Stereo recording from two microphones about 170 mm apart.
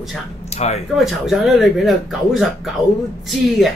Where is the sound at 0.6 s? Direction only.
40° left (ahead or behind).